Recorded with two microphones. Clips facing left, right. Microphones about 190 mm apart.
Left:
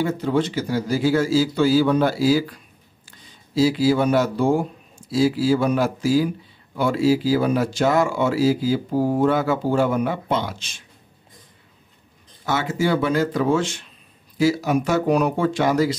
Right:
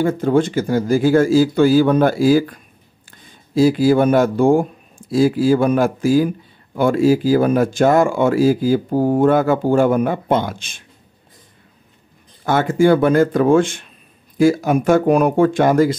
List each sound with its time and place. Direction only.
0.0 s speech: 50° right (ahead or behind)
12.4 s speech: 55° right (ahead or behind)